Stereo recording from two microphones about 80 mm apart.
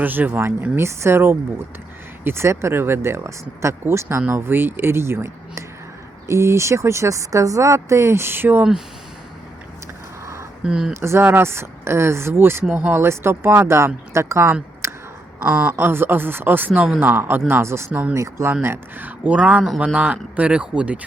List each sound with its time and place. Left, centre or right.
0.0 s speech: right
10.6 s speech: centre
11.0 s speech: right
12.6 s speech: centre
12.9 s speech: right
14.8 s a sound: right
15.4 s speech: centre
15.7 s speech: right